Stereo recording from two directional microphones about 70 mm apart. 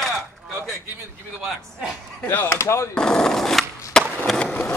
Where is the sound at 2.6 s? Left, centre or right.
Left.